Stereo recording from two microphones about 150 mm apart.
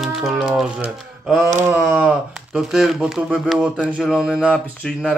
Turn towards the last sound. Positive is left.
turn(degrees=0)  # may be behind; listen again after turning